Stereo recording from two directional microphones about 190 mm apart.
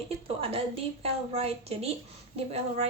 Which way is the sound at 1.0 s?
30° right (ahead or behind).